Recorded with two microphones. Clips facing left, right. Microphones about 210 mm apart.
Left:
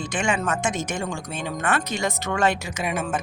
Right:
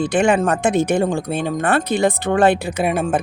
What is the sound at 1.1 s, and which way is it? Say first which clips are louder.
Speech: right 9 dB; 35° right (ahead or behind).